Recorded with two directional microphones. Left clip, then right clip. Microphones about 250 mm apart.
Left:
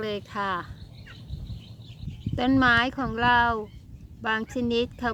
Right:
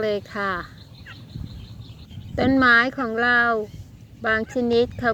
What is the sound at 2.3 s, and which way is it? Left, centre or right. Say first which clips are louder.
Speech: right 5 dB; centre.